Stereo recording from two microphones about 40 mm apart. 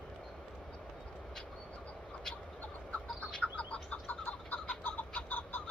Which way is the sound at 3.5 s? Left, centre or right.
Left.